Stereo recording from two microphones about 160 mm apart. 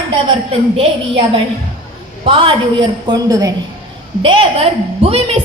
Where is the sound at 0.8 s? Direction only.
35° right (ahead or behind).